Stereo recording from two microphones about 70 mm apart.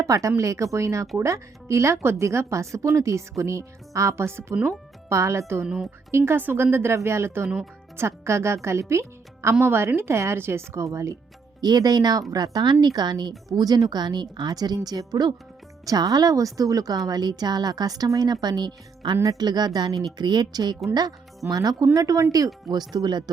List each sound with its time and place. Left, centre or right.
0.0 s speech: right
5.6 s a woman's voice: centre
6.1 s a woman's voice: right
11.6 s a woman's voice: right
13.5 s a woman's voice: right
19.1 s speech: right
19.4 s a woman's voice: right
21.9 s speech: right
22.7 s speech: right